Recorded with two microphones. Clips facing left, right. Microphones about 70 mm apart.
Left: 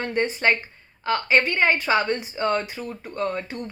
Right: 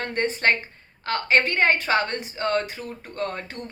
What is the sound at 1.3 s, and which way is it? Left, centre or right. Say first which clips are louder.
A woman's voice: right 1 dB; right.